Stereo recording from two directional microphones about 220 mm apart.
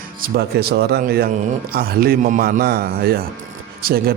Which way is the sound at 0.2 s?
45° right (ahead or behind).